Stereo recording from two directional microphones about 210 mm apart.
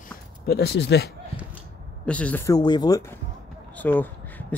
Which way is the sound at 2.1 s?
5° left (ahead or behind).